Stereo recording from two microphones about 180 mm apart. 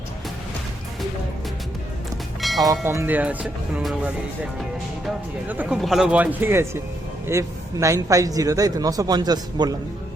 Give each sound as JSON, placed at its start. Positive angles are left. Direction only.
{"t": 2.4, "sound": "train", "side_deg": 0}
{"t": 2.8, "sound": "a man's voice", "side_deg": -15}